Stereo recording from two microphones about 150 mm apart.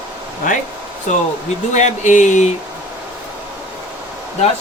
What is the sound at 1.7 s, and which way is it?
Speech, 55° left (ahead or behind).